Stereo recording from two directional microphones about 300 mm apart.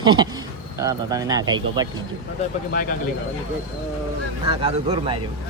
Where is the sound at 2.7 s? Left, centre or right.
Left.